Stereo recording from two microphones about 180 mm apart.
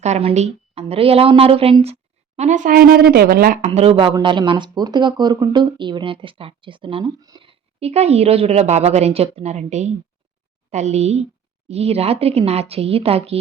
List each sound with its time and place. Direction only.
0.0 s a woman's voice: 35° right (ahead or behind)
3.7 s a woman's voice: 30° right (ahead or behind)